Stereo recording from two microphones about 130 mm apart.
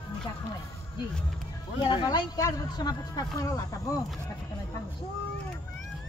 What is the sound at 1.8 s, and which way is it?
Speech, 35° left (ahead or behind).